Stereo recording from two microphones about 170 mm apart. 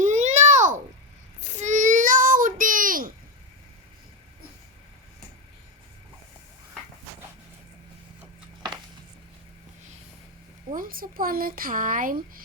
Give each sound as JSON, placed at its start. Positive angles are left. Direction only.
{"t": 0.0, "sound": "babbling", "side_deg": -45}
{"t": 1.5, "sound": "child singing", "side_deg": -45}
{"t": 10.8, "sound": "speech", "side_deg": -55}